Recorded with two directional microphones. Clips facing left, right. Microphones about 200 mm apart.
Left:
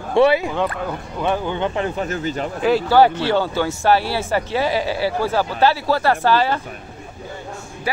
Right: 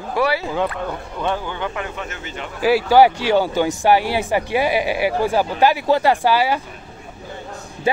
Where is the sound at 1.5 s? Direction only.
25° left (ahead or behind).